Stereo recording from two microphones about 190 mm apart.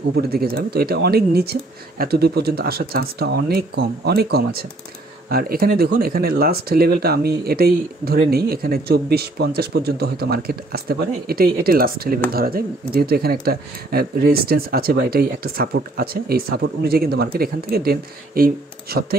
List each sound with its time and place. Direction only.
0.1 s speech: 55° right (ahead or behind)